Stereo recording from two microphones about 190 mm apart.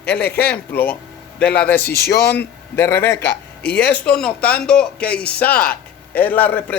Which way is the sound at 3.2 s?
60° left (ahead or behind).